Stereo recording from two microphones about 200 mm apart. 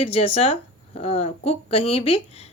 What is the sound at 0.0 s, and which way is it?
A woman's voice, 30° left (ahead or behind).